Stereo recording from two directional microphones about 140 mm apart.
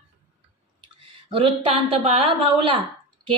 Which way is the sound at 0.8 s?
40° right (ahead or behind).